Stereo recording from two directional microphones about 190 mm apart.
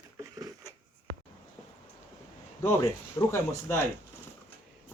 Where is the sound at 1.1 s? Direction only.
65° right (ahead or behind).